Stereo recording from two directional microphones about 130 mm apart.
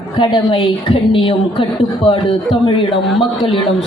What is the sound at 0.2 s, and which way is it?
A woman's voice, 40° left (ahead or behind).